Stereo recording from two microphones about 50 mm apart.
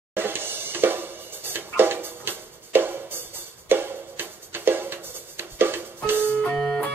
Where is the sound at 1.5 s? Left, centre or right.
Right.